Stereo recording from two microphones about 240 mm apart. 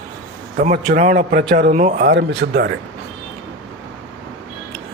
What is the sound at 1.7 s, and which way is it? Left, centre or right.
Speech, right.